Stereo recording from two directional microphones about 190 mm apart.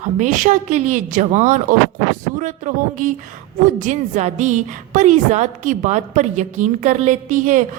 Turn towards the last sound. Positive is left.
turn(degrees=-40)  # may be behind; listen again after turning